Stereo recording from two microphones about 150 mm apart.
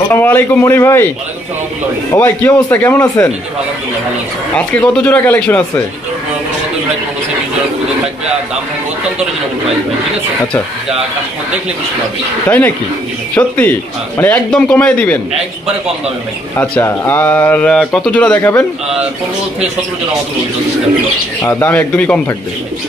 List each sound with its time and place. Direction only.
0.1 s speech: 15° left (ahead or behind)
2.2 s speech: 15° left (ahead or behind)
4.6 s speech: 10° left (ahead or behind)
12.4 s speech: 10° left (ahead or behind)
16.5 s speech: 15° left (ahead or behind)
21.4 s speech: 15° left (ahead or behind)